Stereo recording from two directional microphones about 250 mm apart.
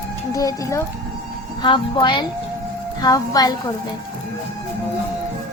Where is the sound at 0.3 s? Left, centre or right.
Centre.